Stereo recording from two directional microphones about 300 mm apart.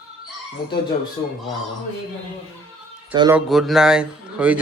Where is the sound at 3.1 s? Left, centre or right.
Centre.